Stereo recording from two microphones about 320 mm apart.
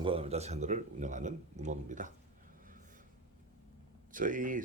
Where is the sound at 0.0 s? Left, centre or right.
Centre.